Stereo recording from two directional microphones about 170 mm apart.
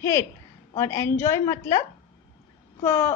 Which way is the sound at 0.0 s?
15° left (ahead or behind).